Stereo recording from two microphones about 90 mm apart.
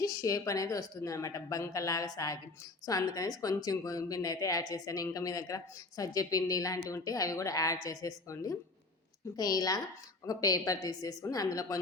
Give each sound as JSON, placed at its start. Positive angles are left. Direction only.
{"t": 0.0, "sound": "a woman's voice", "side_deg": 40}